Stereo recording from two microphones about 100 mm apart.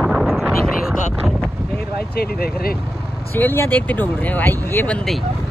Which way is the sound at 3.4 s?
20° left (ahead or behind).